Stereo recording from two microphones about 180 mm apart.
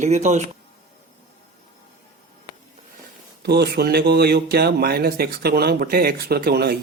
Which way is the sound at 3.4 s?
65° right (ahead or behind).